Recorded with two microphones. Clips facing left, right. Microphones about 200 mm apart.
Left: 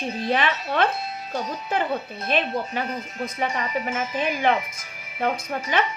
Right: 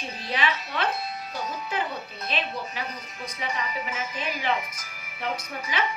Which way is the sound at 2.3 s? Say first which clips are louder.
Left 8 dB; 55° left (ahead or behind).